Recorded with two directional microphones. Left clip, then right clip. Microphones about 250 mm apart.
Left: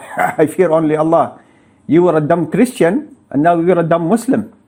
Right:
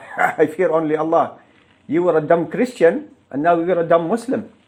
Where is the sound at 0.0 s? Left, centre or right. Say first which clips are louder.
Left 3 dB; left.